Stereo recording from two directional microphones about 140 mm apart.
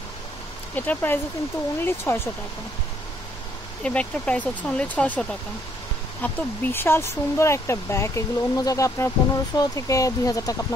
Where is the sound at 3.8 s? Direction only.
10° left (ahead or behind).